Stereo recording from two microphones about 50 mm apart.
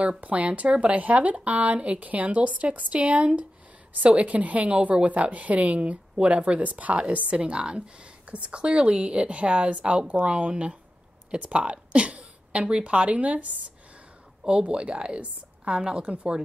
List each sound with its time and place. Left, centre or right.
0.2 s a woman's voice: right